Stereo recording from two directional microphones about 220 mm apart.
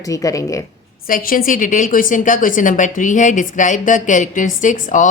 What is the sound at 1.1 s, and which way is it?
A woman's voice, 40° left (ahead or behind).